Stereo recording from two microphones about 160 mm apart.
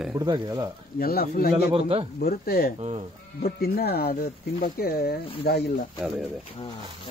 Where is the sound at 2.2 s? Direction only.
70° left (ahead or behind).